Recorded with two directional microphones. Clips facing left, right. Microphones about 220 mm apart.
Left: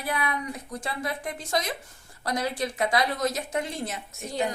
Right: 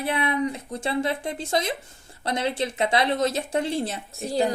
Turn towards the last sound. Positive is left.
turn(degrees=-35)  # may be behind; listen again after turning